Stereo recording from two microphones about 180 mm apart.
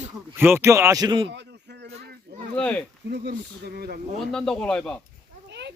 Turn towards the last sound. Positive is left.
turn(degrees=-70)  # may be behind; listen again after turning